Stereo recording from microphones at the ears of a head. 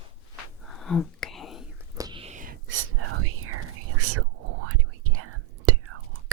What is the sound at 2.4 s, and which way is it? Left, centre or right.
Whispering, right.